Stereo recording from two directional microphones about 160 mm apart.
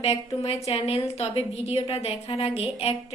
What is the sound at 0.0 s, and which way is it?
A woman's voice, 40° left (ahead or behind).